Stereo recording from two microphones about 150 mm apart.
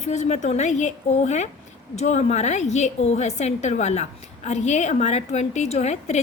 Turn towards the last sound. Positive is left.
turn(degrees=50)  # may be behind; listen again after turning